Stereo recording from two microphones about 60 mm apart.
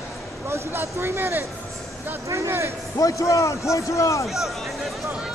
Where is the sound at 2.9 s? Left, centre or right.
Left.